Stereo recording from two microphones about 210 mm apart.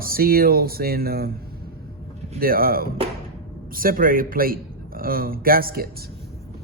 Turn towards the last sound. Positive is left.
turn(degrees=-45)  # may be behind; listen again after turning